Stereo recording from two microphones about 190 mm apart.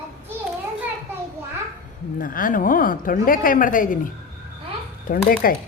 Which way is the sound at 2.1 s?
45° left (ahead or behind).